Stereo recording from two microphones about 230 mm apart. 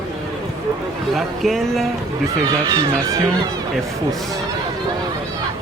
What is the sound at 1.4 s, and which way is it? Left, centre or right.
Speech, centre.